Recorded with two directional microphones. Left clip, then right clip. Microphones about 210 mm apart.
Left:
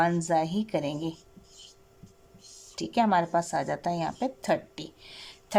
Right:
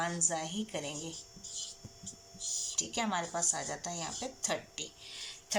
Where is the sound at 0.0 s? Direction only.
55° left (ahead or behind).